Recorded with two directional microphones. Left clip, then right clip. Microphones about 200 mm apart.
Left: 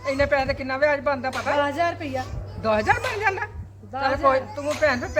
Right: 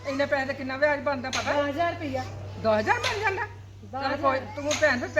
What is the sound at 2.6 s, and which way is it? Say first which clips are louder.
Speech: left 2 dB; 30° left (ahead or behind).